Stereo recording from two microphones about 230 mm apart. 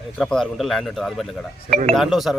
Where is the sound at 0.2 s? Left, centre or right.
Centre.